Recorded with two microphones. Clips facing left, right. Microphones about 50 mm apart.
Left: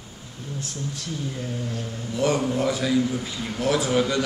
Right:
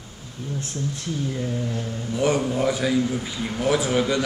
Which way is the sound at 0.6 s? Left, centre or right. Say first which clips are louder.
Right 2 dB; right.